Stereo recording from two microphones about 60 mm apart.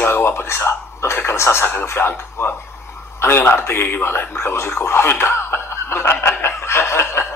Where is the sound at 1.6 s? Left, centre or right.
Left.